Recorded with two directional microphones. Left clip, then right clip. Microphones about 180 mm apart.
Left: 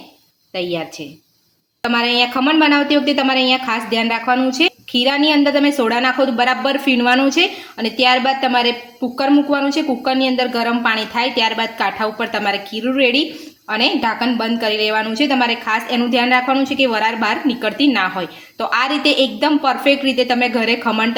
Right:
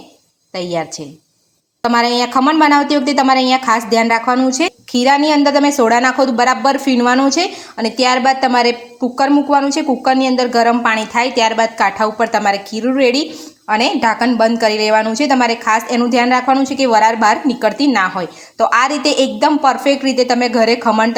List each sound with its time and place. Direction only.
0.5 s a woman's voice: 40° right (ahead or behind)